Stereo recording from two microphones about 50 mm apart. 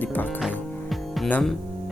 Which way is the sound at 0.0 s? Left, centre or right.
Left.